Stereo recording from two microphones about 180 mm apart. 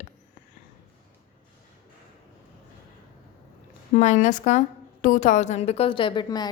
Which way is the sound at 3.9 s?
40° left (ahead or behind).